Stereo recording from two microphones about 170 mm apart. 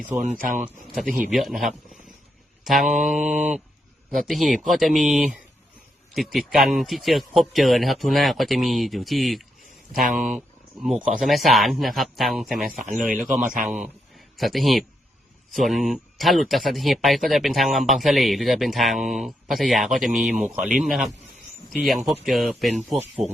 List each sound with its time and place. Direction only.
0.1 s speech: 45° right (ahead or behind)
1.3 s speech: centre (ahead or behind)
2.6 s speech: centre (ahead or behind)
3.2 s speech: 45° right (ahead or behind)
4.1 s speech: centre (ahead or behind)
12.6 s speech: 50° right (ahead or behind)
13.7 s speech: 5° right (ahead or behind)